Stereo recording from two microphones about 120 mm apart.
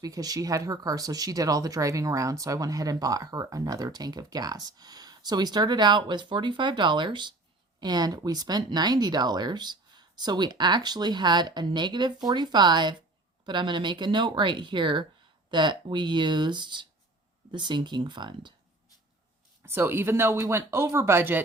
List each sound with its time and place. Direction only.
0.0 s speech: 30° right (ahead or behind)
19.6 s speech: 20° right (ahead or behind)